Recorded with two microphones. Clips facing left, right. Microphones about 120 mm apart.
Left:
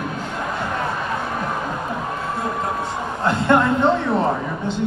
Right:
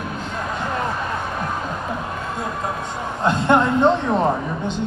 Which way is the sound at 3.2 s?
20° right (ahead or behind).